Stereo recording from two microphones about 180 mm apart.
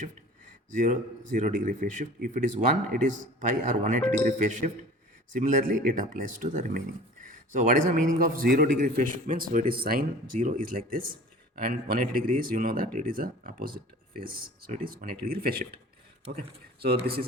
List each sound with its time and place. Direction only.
0.7 s speech: 45° right (ahead or behind)